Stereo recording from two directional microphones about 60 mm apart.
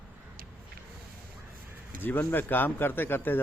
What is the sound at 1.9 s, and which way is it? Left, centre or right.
Speech, left.